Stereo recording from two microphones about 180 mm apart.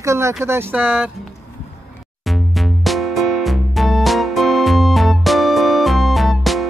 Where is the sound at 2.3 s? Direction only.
Centre (ahead or behind).